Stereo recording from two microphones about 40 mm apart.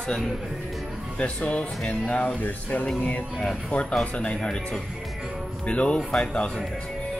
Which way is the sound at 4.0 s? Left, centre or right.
Left.